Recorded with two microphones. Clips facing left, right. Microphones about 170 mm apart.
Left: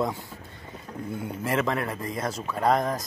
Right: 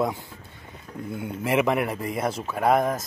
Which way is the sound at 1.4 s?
15° right (ahead or behind).